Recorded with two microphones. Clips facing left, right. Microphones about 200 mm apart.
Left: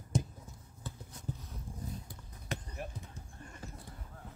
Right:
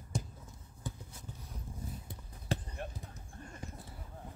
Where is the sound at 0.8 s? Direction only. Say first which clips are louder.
Right 3 dB; 15° right (ahead or behind).